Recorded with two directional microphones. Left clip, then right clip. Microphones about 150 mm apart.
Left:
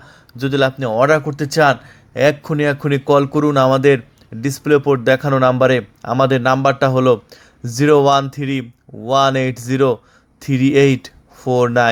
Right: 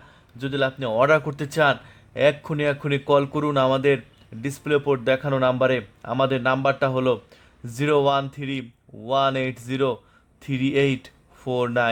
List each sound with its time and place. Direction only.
0.3 s speech: 30° left (ahead or behind)
1.2 s speech: centre (ahead or behind)
1.5 s a man's voice: 15° left (ahead or behind)